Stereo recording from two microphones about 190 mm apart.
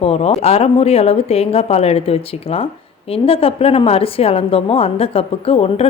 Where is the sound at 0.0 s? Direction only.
30° left (ahead or behind).